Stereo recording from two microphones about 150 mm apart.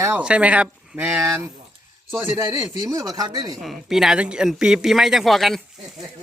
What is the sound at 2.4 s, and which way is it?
Speech, 25° right (ahead or behind).